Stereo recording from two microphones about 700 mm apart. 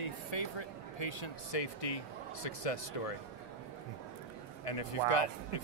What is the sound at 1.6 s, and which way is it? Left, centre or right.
Speech, left.